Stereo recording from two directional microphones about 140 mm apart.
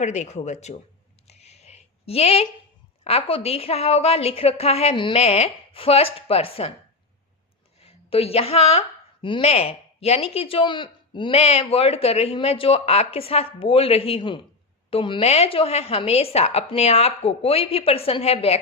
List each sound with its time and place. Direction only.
0.0 s speech: 55° left (ahead or behind)
1.3 s a sound: 50° left (ahead or behind)
3.0 s speech: 45° left (ahead or behind)
7.8 s a woman's voice: 45° left (ahead or behind)